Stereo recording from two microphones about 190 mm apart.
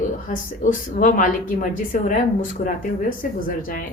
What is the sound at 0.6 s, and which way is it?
A woman's voice, 40° left (ahead or behind).